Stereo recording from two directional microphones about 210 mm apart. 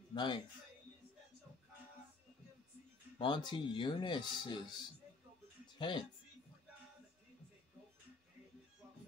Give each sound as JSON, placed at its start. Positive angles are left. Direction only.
{"t": 0.1, "sound": "a man's voice", "side_deg": 20}
{"t": 3.2, "sound": "speech", "side_deg": 20}
{"t": 5.8, "sound": "speech", "side_deg": 20}